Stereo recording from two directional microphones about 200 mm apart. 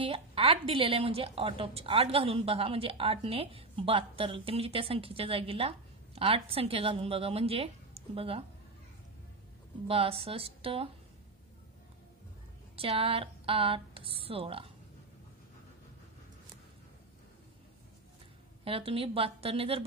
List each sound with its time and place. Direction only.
0.0 s a woman's voice: 25° right (ahead or behind)
9.8 s a woman's voice: 30° right (ahead or behind)
12.7 s a woman's voice: 30° right (ahead or behind)
18.6 s a woman's voice: 25° right (ahead or behind)